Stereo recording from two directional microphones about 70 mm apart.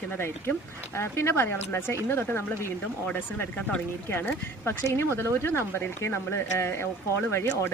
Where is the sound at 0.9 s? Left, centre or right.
Left.